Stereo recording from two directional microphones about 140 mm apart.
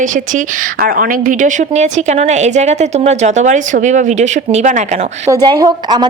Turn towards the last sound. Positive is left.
turn(degrees=-30)  # may be behind; listen again after turning